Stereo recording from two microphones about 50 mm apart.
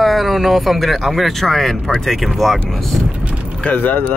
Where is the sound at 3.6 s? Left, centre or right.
Left.